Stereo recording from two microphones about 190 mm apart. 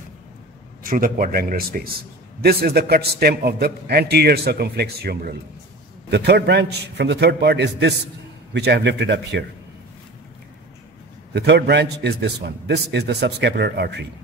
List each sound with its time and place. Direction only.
0.8 s a man's voice: 45° right (ahead or behind); by 9.4 s 65° right (ahead or behind)
11.3 s a man's voice: 60° right (ahead or behind)